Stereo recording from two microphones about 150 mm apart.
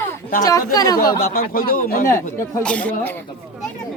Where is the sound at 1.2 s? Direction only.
75° left (ahead or behind).